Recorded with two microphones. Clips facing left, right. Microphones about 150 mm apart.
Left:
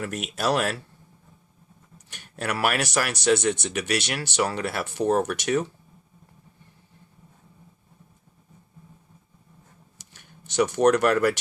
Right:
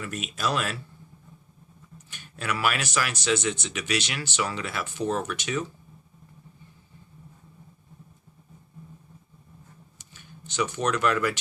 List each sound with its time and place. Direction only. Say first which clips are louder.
0.0 s speech: left 3 dB; 65° left (ahead or behind)
2.0 s speech: left 2 dB; 65° left (ahead or behind)
10.1 s speech: right 4 dB; 70° left (ahead or behind)